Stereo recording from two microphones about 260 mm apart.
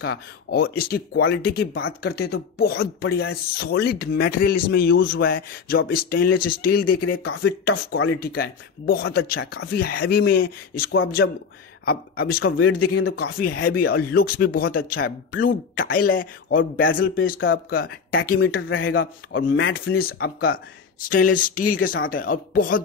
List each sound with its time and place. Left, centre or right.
0.0 s speech: left
1.8 s speech: left
2.1 s speech: left
16.1 s speech: left
18.2 s speech: left